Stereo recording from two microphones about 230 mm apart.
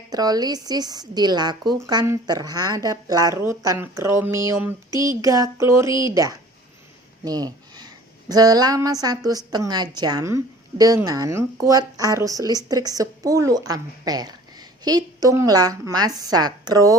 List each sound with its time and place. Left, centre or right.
0.1 s a woman's voice: centre